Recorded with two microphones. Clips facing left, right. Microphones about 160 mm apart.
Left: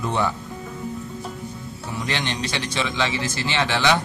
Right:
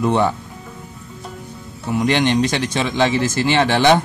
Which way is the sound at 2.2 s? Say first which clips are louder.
Right 10 dB; 50° right (ahead or behind).